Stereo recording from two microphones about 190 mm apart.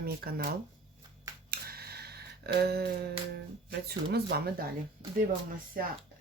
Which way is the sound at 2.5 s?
60° right (ahead or behind).